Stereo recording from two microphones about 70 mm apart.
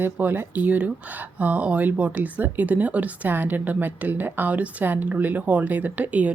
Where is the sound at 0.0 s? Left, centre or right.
Right.